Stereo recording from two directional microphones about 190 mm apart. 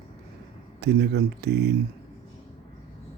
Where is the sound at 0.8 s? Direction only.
60° right (ahead or behind).